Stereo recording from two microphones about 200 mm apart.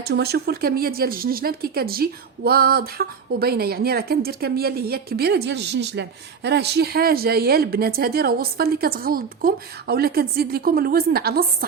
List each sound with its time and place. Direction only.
0.0 s speech: 55° right (ahead or behind)